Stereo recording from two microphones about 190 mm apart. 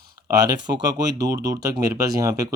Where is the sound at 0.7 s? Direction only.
20° right (ahead or behind).